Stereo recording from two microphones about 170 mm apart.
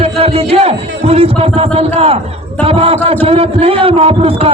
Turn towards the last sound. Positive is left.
turn(degrees=-35)  # may be behind; listen again after turning